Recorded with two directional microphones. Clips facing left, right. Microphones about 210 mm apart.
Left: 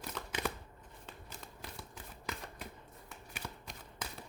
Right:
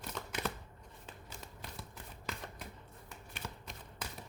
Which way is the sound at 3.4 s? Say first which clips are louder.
Right 1 dB; centre (ahead or behind).